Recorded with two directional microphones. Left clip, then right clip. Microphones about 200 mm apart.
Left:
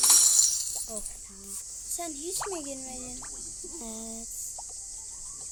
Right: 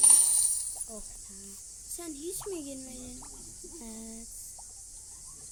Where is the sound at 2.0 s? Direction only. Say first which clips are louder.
Left 5 dB; 30° right (ahead or behind).